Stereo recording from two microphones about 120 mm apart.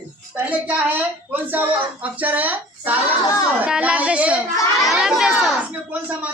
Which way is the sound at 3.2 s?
30° left (ahead or behind).